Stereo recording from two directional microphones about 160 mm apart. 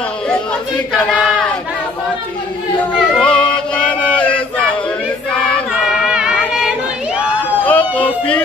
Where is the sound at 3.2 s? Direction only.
5° left (ahead or behind).